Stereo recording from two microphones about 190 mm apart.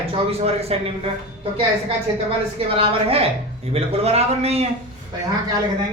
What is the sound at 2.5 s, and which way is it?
A man's voice, 30° right (ahead or behind).